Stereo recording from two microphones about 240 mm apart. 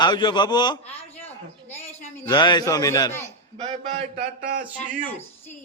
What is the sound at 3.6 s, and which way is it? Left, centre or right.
A man's voice, right.